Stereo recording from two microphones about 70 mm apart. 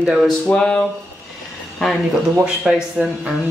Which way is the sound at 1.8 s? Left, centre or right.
Centre.